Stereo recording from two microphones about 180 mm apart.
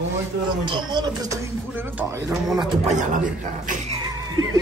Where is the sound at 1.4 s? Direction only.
10° right (ahead or behind).